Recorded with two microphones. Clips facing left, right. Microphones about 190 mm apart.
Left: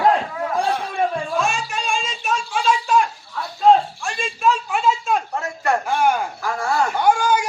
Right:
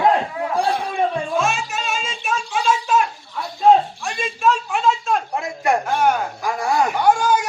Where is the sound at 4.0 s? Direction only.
5° right (ahead or behind).